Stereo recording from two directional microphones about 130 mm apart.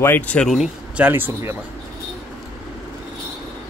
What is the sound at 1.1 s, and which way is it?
Speech, 15° right (ahead or behind).